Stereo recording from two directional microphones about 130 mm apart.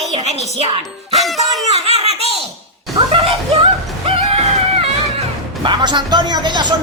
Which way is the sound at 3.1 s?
45° right (ahead or behind).